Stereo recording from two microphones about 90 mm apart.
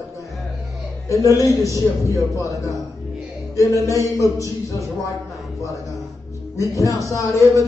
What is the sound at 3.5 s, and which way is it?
Speech, 35° left (ahead or behind).